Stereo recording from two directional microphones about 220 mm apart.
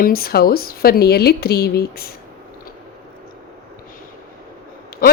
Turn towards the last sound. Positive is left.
turn(degrees=40)  # may be behind; listen again after turning